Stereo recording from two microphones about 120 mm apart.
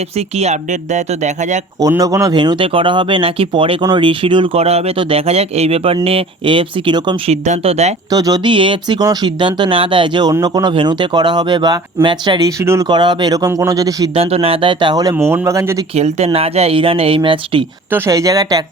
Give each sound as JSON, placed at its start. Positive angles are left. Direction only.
{"t": 0.2, "sound": "speech", "side_deg": -65}
{"t": 1.8, "sound": "speech", "side_deg": -30}
{"t": 2.3, "sound": "speech", "side_deg": -40}
{"t": 4.6, "sound": "speech", "side_deg": -60}
{"t": 7.3, "sound": "speech", "side_deg": -65}
{"t": 8.1, "sound": "speech", "side_deg": -30}
{"t": 12.9, "sound": "speech", "side_deg": -40}
{"t": 14.2, "sound": "speech", "side_deg": -55}
{"t": 15.1, "sound": "speech", "side_deg": -20}
{"t": 16.0, "sound": "speech", "side_deg": -65}
{"t": 17.9, "sound": "speech", "side_deg": -25}